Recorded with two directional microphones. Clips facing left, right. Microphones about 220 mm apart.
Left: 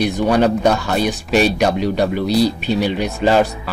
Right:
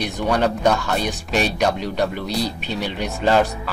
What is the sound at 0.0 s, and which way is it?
Speech, 10° left (ahead or behind).